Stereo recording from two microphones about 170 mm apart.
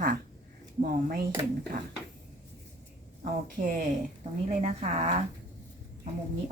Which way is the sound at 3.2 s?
50° right (ahead or behind).